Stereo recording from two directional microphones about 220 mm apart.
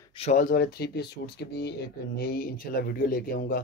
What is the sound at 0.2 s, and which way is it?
Speech, 35° left (ahead or behind).